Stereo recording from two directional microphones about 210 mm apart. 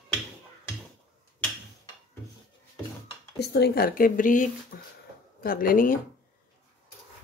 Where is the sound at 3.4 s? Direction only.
50° left (ahead or behind).